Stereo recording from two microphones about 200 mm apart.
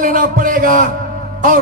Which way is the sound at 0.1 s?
40° right (ahead or behind).